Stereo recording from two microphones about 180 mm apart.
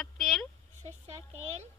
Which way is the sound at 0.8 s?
40° right (ahead or behind).